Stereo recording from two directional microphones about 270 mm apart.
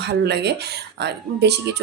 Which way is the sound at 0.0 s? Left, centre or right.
Right.